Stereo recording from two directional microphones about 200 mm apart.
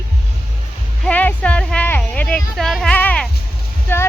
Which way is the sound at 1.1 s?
5° left (ahead or behind).